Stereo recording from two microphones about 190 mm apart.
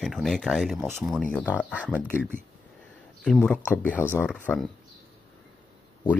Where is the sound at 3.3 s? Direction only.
5° left (ahead or behind).